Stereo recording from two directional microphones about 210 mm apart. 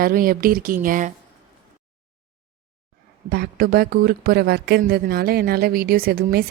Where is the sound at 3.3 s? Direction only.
45° right (ahead or behind).